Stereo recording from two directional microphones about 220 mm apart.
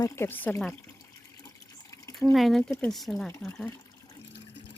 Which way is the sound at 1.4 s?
15° left (ahead or behind).